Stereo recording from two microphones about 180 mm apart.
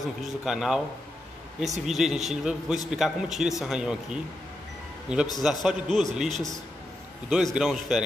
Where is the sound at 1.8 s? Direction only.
Centre (ahead or behind).